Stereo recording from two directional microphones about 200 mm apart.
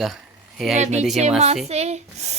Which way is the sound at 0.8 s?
35° right (ahead or behind).